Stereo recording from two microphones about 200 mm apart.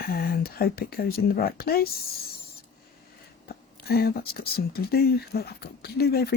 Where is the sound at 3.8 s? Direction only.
50° left (ahead or behind).